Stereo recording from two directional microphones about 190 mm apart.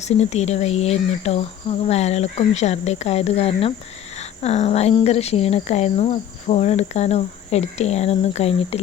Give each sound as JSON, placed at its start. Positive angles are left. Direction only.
{"t": 0.0, "sound": "speech", "side_deg": 35}